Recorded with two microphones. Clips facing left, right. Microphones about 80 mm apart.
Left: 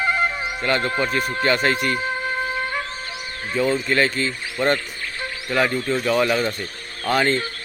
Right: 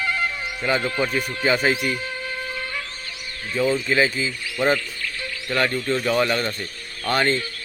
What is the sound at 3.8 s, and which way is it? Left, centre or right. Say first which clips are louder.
Speech: even; centre.